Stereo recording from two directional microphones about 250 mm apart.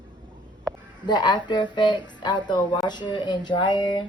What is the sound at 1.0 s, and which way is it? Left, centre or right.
Speech, centre.